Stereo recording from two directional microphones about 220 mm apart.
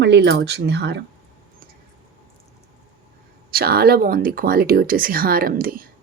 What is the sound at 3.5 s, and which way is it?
Speech, 45° right (ahead or behind).